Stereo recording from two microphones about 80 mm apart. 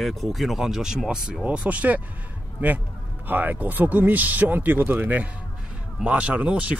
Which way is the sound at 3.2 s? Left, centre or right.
Right.